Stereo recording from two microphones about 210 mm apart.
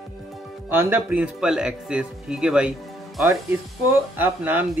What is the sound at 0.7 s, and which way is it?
Speech, 10° right (ahead or behind).